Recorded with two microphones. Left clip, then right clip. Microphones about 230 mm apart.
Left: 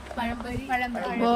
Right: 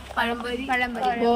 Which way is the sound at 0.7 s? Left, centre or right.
Centre.